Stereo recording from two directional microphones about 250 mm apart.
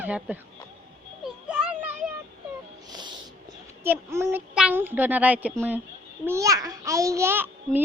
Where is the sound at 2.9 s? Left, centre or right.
Centre.